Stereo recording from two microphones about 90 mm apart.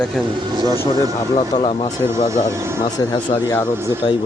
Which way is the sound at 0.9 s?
45° left (ahead or behind).